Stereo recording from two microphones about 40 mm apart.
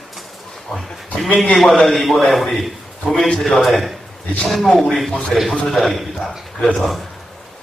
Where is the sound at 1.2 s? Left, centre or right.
Left.